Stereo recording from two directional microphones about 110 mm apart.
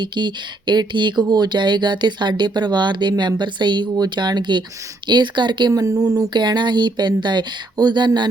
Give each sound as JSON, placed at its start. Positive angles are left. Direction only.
{"t": 0.0, "sound": "speech", "side_deg": -45}